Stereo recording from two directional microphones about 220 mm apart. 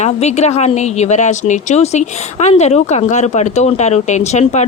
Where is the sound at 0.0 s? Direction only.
30° left (ahead or behind).